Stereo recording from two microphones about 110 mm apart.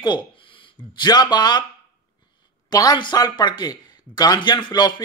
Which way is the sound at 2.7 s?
35° left (ahead or behind).